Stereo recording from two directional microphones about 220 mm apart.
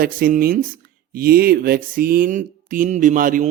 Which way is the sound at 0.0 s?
40° right (ahead or behind).